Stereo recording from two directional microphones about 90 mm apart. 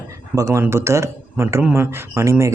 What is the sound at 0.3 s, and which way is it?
A man's voice, 35° right (ahead or behind).